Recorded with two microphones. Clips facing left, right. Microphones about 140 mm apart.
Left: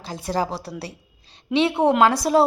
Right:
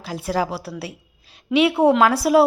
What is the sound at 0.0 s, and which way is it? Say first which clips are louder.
Speech: right 2 dB; 5° right (ahead or behind).